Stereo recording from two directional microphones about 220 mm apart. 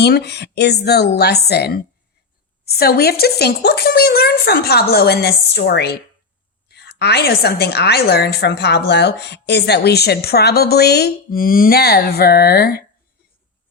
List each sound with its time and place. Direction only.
0.0 s a woman's voice: 50° left (ahead or behind)